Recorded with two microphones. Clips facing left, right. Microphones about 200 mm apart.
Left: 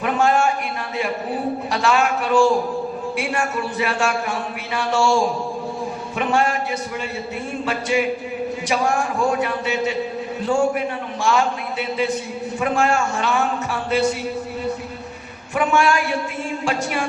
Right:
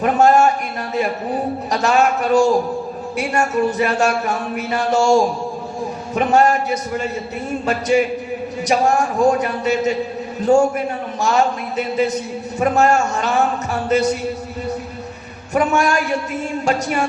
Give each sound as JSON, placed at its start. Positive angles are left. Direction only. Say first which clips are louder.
{"t": 0.0, "sound": "a man's voice", "louder": "right 5 dB", "side_deg": -40}
{"t": 1.7, "sound": "a man's voice", "louder": "right 4 dB", "side_deg": -40}
{"t": 7.6, "sound": "a sound", "louder": "right 5 dB", "side_deg": -40}
{"t": 8.6, "sound": "a man's voice", "louder": "right 5 dB", "side_deg": -40}
{"t": 15.5, "sound": "a man's voice", "louder": "right 2 dB", "side_deg": -40}